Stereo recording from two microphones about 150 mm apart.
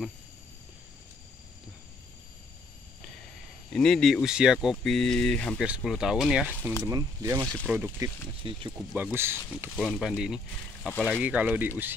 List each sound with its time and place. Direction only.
3.7 s speech: 5° left (ahead or behind)
5.6 s speech: 5° right (ahead or behind)
6.8 s speech: 20° right (ahead or behind)
7.7 s speech: 10° right (ahead or behind)
8.4 s speech: 35° right (ahead or behind)
8.9 s speech: 15° right (ahead or behind)
9.8 s speech: centre (ahead or behind)
10.9 s speech: 15° left (ahead or behind)
11.1 s speech: 10° right (ahead or behind)